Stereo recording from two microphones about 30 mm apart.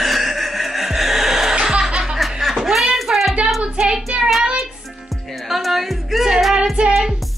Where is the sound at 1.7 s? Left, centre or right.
Right.